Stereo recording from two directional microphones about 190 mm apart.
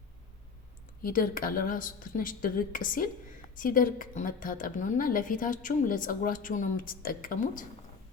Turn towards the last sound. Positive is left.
turn(degrees=45)  # may be behind; listen again after turning